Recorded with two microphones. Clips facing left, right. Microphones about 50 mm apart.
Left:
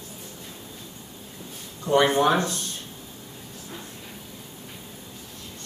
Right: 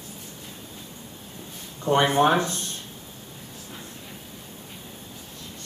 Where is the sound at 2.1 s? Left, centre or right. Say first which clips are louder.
Right 1 dB; right.